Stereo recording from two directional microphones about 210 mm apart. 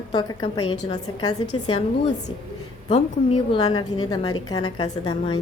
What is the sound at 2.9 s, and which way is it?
A woman's voice, 25° left (ahead or behind).